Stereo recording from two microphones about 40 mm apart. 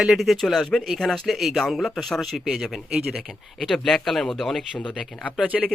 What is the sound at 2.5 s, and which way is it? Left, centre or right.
Speech, centre.